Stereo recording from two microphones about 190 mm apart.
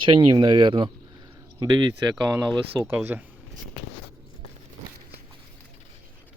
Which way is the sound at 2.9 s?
10° right (ahead or behind).